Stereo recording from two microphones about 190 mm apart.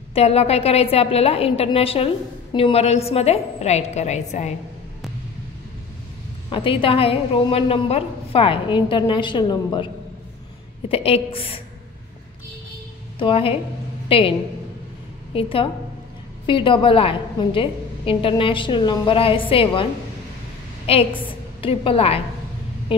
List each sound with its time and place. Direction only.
0.1 s a woman's voice: 30° left (ahead or behind)
6.5 s a woman's voice: 25° left (ahead or behind)
10.9 s a woman's voice: 30° left (ahead or behind)
13.2 s a woman's voice: 30° left (ahead or behind)
15.3 s a woman's voice: 30° left (ahead or behind)
22.9 s a sound: 25° left (ahead or behind)